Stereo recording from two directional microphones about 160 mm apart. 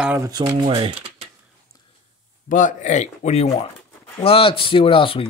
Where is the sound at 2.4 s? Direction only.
55° left (ahead or behind).